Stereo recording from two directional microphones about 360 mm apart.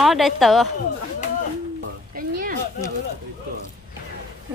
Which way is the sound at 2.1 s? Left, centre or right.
Right.